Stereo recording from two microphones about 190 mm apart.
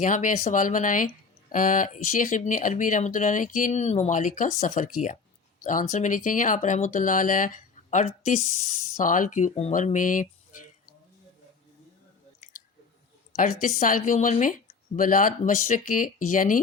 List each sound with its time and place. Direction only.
0.0 s speech: 40° left (ahead or behind)
13.3 s speech: 45° left (ahead or behind)